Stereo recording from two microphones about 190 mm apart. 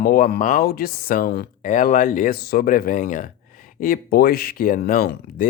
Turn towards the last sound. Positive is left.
turn(degrees=50)  # may be behind; listen again after turning